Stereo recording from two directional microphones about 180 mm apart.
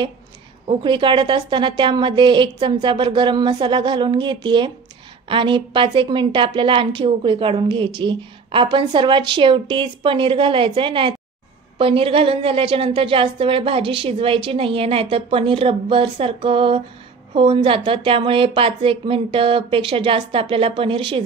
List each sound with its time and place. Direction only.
0.7 s a woman's voice: 25° right (ahead or behind)